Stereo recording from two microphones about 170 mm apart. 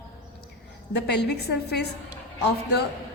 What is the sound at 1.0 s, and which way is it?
Speech, 80° left.